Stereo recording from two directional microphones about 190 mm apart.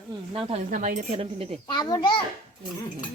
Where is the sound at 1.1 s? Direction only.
30° right (ahead or behind).